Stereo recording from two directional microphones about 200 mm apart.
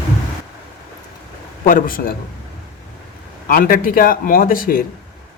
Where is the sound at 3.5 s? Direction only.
45° left (ahead or behind).